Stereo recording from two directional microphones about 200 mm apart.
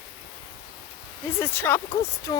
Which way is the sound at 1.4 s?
10° left (ahead or behind).